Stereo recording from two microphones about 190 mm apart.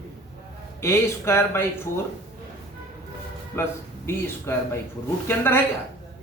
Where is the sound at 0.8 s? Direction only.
15° left (ahead or behind).